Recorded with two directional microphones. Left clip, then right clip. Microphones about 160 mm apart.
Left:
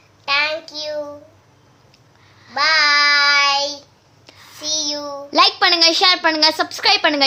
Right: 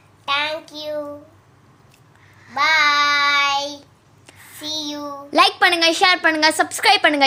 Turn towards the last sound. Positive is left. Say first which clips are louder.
# right 1 dB
turn(degrees=-10)  # may be behind; listen again after turning